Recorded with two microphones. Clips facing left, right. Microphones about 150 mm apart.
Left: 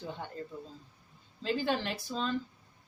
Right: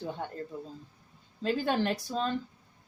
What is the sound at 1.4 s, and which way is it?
Speech, 45° right (ahead or behind).